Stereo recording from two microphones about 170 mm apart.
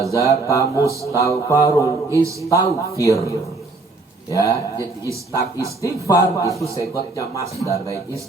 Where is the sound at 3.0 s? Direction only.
20° left (ahead or behind).